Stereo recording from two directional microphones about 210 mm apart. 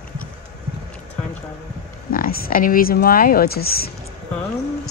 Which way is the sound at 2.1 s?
45° left (ahead or behind).